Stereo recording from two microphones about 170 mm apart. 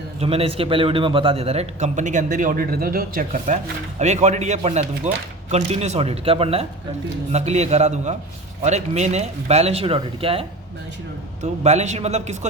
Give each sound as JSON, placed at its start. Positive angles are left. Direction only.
{"t": 0.2, "sound": "a man's voice", "side_deg": -35}
{"t": 11.6, "sound": "speech", "side_deg": -40}